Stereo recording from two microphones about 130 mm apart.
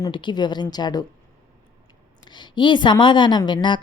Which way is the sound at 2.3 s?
35° left (ahead or behind).